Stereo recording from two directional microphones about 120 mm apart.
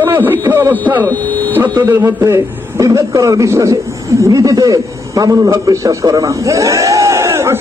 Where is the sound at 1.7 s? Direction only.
25° right (ahead or behind).